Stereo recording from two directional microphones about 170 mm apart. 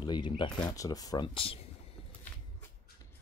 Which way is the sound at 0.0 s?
25° left (ahead or behind).